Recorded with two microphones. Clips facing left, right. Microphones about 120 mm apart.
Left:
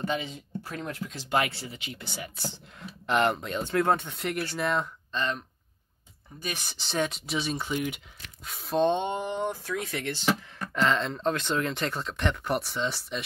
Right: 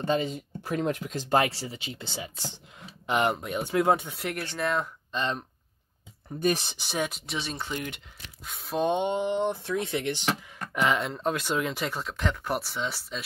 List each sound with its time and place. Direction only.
0.0 s speech: 40° right (ahead or behind)
0.8 s speech: 65° right (ahead or behind)
1.1 s speech: 40° right (ahead or behind); by 4.8 s centre (ahead or behind)
5.1 s speech: 25° right (ahead or behind)
6.5 s speech: 25° right (ahead or behind)
6.8 s speech: 10° right (ahead or behind)